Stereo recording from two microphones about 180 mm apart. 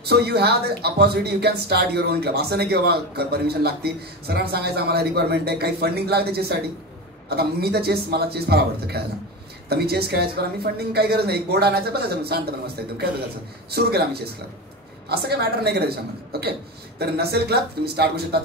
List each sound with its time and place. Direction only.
0.1 s speech: 65° right (ahead or behind)